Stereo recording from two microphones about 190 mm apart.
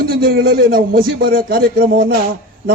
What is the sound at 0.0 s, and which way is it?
A man's voice, 50° right (ahead or behind).